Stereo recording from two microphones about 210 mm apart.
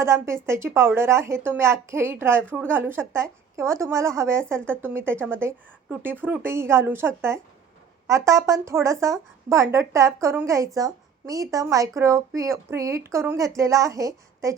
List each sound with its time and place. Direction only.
0.0 s a woman's voice: 15° right (ahead or behind)